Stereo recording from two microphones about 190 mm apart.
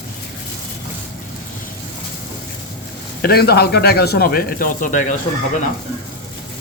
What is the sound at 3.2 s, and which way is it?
Speech, 55° left (ahead or behind).